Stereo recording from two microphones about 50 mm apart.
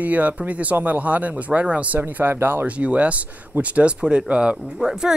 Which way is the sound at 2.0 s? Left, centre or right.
Right.